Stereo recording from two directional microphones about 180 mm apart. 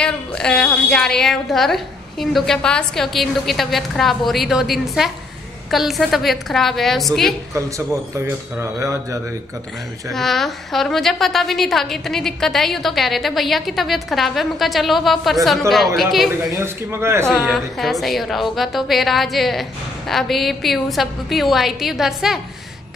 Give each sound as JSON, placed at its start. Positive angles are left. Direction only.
{"t": 0.0, "sound": "a woman's voice", "side_deg": 5}
{"t": 7.5, "sound": "speech", "side_deg": -15}
{"t": 10.1, "sound": "a woman's voice", "side_deg": 0}
{"t": 16.5, "sound": "speech", "side_deg": -15}
{"t": 17.2, "sound": "a woman's voice", "side_deg": 0}